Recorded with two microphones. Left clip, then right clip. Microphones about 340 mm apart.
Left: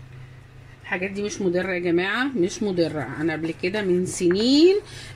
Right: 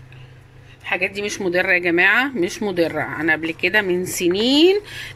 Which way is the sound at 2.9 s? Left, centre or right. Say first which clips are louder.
Right 6 dB; right.